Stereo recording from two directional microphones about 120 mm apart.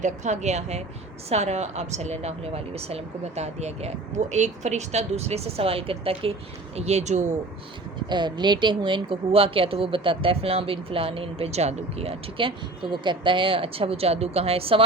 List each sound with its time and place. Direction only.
0.0 s a woman's voice: 75° right (ahead or behind); by 6.3 s 50° right (ahead or behind)
6.7 s a woman's voice: 65° right (ahead or behind)
8.1 s speech: 40° right (ahead or behind)